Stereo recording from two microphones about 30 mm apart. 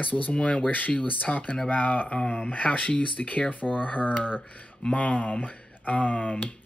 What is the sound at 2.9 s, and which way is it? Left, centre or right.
Speech, left.